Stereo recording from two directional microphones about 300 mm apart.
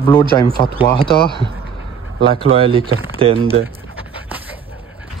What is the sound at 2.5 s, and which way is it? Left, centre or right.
Speech, centre.